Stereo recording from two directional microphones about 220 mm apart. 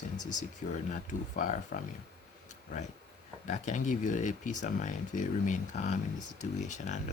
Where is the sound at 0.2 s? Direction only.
35° left (ahead or behind).